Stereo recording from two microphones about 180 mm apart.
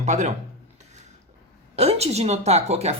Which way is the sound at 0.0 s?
40° right (ahead or behind).